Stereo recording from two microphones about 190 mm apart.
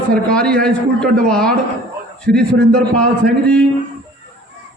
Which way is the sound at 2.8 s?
5° left (ahead or behind).